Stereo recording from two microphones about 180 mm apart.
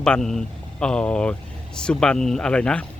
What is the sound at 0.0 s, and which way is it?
Speech, 5° left (ahead or behind).